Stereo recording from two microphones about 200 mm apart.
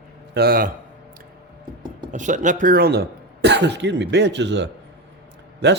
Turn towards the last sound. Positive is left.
turn(degrees=-60)  # may be behind; listen again after turning